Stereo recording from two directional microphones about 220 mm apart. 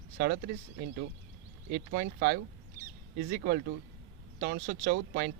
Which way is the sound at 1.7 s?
40° right (ahead or behind).